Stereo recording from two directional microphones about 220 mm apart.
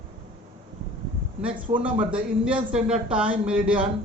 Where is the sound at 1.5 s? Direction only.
25° right (ahead or behind).